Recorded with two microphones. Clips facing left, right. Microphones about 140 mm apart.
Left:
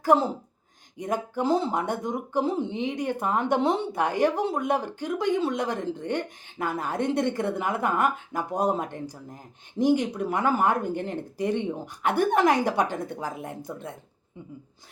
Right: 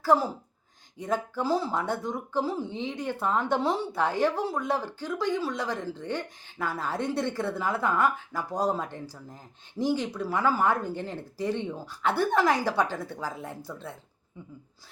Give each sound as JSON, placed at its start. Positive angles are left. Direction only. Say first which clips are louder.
{"t": 0.0, "sound": "speech", "louder": "left 2 dB", "side_deg": 20}